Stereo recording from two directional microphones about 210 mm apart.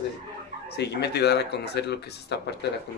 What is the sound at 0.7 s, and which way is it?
Speech, 55° left (ahead or behind).